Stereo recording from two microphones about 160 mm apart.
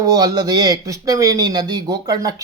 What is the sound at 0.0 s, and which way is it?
Speech, 25° right (ahead or behind).